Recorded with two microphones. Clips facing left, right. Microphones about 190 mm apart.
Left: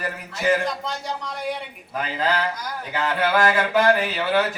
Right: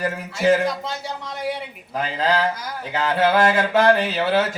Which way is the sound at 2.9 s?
25° right (ahead or behind).